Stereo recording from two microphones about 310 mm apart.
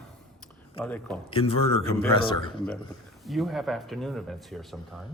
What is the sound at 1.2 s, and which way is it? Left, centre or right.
Speech, centre.